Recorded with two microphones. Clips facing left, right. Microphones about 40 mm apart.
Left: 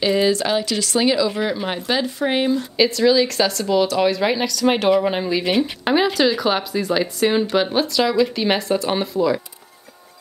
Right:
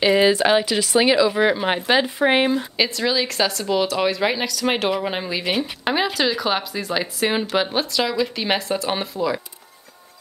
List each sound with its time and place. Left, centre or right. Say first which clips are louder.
0.0 s speech: right 2 dB; right
2.8 s speech: left 8 dB; centre